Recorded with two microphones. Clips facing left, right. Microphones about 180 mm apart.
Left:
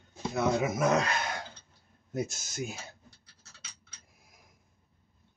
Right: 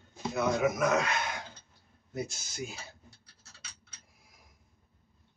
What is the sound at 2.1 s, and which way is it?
Speech, 45° left (ahead or behind).